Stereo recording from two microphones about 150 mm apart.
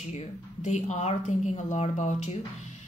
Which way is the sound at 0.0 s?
50° left (ahead or behind).